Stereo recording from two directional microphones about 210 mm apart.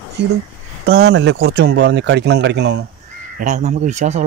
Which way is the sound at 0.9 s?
60° right (ahead or behind).